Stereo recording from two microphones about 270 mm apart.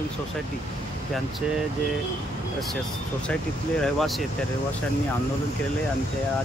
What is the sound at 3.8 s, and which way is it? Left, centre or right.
Speech, centre.